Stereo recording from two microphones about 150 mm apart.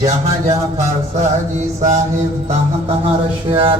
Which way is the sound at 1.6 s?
50° right (ahead or behind).